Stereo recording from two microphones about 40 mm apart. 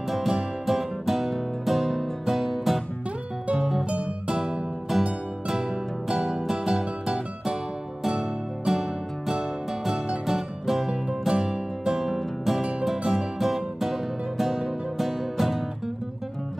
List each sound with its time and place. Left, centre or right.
0.1 s music: centre
15.0 s music: centre